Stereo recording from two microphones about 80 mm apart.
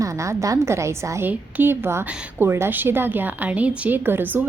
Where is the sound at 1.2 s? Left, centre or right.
Right.